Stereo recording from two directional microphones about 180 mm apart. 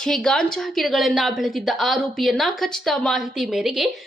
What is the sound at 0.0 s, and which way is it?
A woman's voice, 5° left (ahead or behind).